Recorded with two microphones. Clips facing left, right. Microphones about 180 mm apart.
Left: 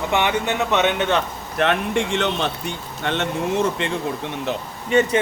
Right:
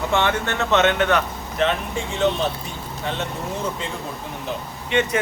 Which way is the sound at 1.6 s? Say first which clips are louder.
Left 3 dB; 70° left (ahead or behind).